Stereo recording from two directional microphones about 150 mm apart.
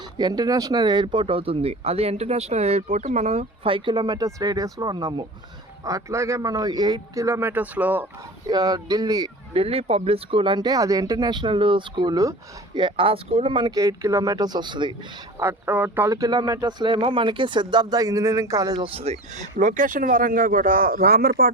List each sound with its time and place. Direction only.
0.2 s speech: 25° right (ahead or behind); by 8.0 s 10° right (ahead or behind)
8.4 s speech: 25° right (ahead or behind)
9.5 s speech: 40° right (ahead or behind)
15.4 s speech: 15° right (ahead or behind)
18.9 s speech: 45° right (ahead or behind); by 21.5 s 90° right